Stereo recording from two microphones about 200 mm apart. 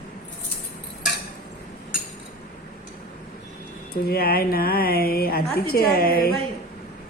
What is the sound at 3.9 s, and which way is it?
A woman's voice, 50° left (ahead or behind).